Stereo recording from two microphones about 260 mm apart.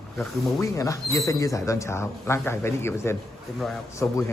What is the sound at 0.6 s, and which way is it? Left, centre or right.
Speech, centre.